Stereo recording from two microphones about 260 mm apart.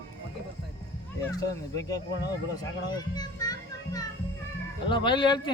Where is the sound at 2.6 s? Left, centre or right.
Centre.